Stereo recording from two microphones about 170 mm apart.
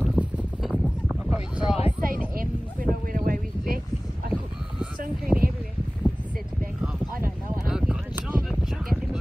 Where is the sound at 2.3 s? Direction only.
55° right (ahead or behind).